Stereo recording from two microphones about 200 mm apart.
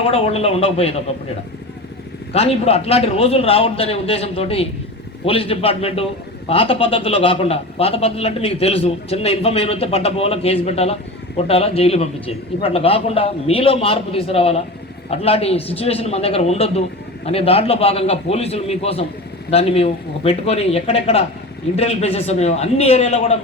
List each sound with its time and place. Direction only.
0.1 s speech: 30° left (ahead or behind)
2.3 s a man's voice: 30° left (ahead or behind)